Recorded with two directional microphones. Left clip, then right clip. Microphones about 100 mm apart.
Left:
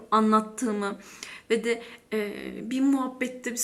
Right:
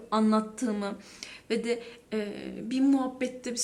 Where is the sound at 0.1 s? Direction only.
40° right (ahead or behind).